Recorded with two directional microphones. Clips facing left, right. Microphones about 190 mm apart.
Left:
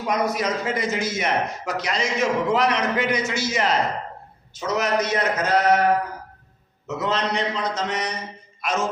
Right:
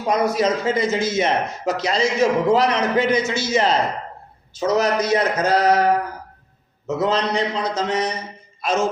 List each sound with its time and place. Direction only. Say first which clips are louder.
0.1 s speech: right 5 dB; 30° right (ahead or behind)
6.8 s speech: right 4 dB; 35° right (ahead or behind)